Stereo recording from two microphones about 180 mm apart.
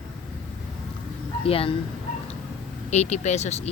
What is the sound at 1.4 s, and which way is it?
Speech, 30° left (ahead or behind).